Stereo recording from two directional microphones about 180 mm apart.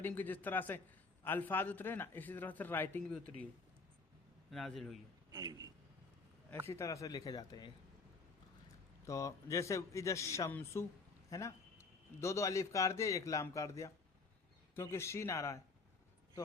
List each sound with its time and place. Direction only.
0.0 s a man's voice: 10° left (ahead or behind)
4.5 s a man's voice: centre (ahead or behind)
5.3 s a man's voice: 20° right (ahead or behind)
6.7 s a man's voice: 15° left (ahead or behind)
9.0 s a man's voice: 15° left (ahead or behind)